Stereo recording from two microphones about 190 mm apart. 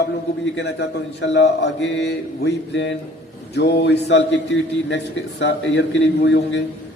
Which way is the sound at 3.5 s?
65° left (ahead or behind).